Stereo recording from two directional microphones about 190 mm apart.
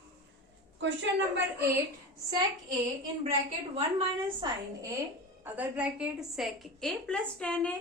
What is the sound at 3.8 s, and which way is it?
Speech, 30° right (ahead or behind).